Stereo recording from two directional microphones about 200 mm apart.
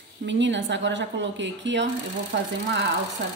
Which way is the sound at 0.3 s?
65° right (ahead or behind).